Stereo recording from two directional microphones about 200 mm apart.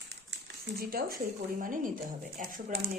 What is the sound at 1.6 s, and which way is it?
Speech, 40° right (ahead or behind).